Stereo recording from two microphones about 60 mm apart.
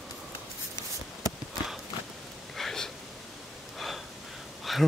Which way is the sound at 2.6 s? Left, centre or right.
Centre.